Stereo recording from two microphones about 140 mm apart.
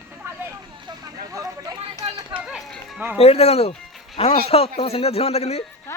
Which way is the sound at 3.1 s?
45° left (ahead or behind).